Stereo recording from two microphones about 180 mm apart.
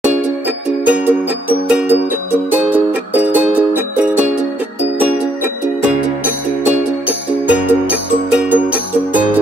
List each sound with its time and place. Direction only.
0.8 s music: 5° right (ahead or behind)
7.1 s music: 10° right (ahead or behind)